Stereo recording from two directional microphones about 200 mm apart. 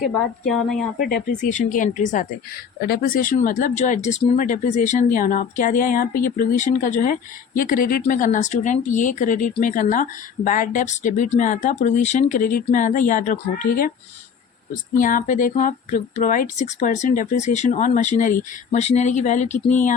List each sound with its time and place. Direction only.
0.2 s a woman's voice: 5° left (ahead or behind)
0.9 s speech: 45° left (ahead or behind)
2.8 s speech: 50° left (ahead or behind)
14.9 s speech: 40° left (ahead or behind)